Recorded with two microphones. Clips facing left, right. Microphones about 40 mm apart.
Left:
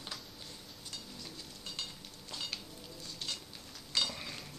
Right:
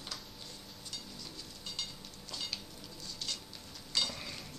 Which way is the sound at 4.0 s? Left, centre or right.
Centre.